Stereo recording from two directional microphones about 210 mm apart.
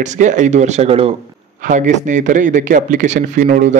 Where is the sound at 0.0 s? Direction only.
35° right (ahead or behind).